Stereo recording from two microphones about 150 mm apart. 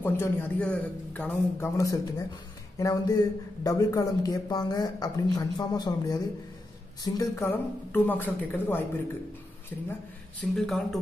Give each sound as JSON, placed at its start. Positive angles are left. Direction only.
{"t": 0.0, "sound": "a woman's voice", "side_deg": 15}
{"t": 1.8, "sound": "a woman's voice", "side_deg": 20}
{"t": 10.5, "sound": "speech", "side_deg": 0}